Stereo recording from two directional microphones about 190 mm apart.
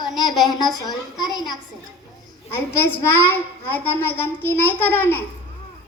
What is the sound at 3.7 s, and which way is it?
A woman's voice, 10° left (ahead or behind).